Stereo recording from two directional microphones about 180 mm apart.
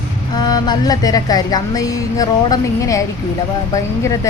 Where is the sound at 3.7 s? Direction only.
15° left (ahead or behind).